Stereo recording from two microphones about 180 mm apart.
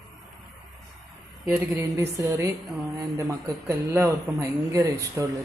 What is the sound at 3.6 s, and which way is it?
Speech, 15° right (ahead or behind).